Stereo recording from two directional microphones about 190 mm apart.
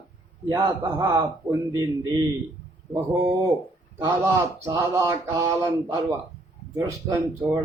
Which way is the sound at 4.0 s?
15° right (ahead or behind).